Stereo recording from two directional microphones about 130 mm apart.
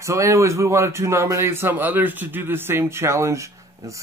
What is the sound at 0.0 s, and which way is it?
A man's voice, 25° right (ahead or behind).